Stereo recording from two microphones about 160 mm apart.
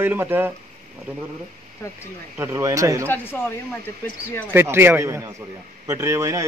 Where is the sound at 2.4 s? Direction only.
20° right (ahead or behind).